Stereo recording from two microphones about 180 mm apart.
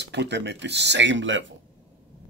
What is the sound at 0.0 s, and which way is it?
Speech, 70° right (ahead or behind).